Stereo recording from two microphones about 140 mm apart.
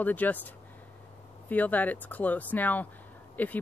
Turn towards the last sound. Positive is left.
turn(degrees=10)  # may be behind; listen again after turning